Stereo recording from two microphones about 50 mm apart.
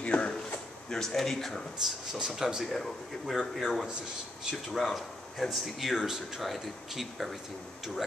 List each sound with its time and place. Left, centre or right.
0.0 s a sound: left
0.8 s a man's voice: centre
2.1 s speech: centre